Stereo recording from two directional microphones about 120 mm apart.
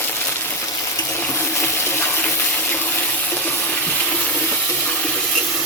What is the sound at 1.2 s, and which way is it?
Water, 20° left (ahead or behind).